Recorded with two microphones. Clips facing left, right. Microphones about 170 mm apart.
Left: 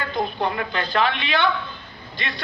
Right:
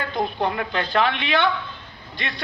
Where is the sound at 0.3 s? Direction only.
15° right (ahead or behind).